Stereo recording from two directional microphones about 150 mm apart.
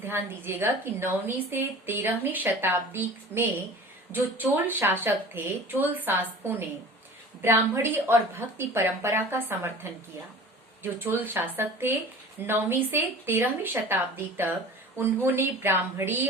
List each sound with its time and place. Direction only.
0.0 s a woman's voice: 15° right (ahead or behind)